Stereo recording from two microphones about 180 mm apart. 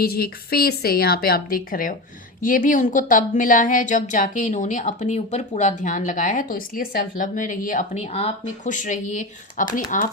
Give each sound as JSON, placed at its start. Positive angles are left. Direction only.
{"t": 0.0, "sound": "a woman's voice", "side_deg": 60}